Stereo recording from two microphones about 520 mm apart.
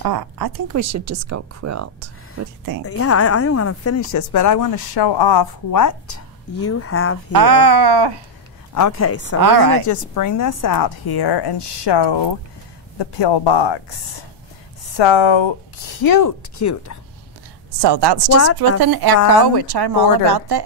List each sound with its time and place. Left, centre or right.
0.0 s speech: right
2.9 s a woman's voice: left
7.3 s speech: right
8.7 s a woman's voice: left
9.4 s speech: right
9.8 s a woman's voice: left
15.0 s speech: left
16.0 s a woman's voice: left
17.7 s a woman's voice: right